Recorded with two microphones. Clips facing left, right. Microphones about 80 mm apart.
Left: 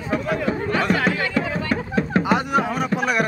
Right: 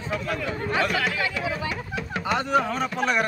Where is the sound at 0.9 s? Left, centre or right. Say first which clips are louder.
Left 5 dB; left.